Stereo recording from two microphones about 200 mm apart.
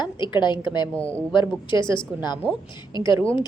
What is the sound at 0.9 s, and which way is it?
Speech, 5° left (ahead or behind).